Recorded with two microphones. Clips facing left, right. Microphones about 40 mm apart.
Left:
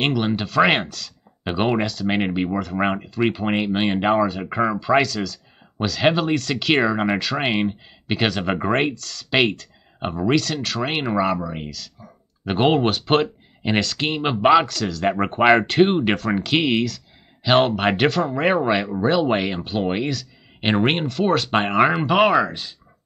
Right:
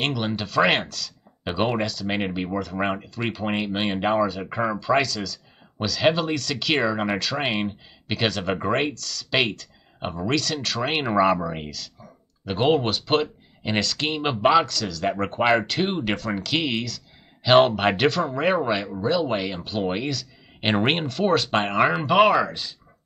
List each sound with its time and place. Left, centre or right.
0.4 s speech: centre
12.4 s speech: left
12.7 s speech: centre
15.1 s speech: left
16.8 s speech: centre
18.9 s speech: left
19.1 s speech: centre